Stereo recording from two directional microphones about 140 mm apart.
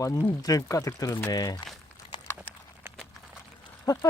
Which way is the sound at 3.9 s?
25° left (ahead or behind).